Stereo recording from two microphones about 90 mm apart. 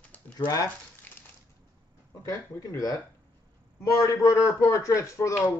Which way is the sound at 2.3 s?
30° left (ahead or behind).